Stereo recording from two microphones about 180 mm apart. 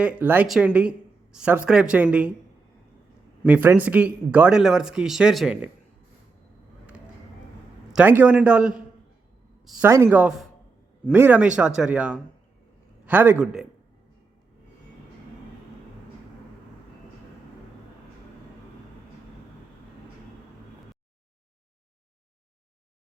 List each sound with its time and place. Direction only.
0.0 s a man's voice: 5° right (ahead or behind)
3.4 s a man's voice: 10° right (ahead or behind)
7.9 s a man's voice: 10° right (ahead or behind)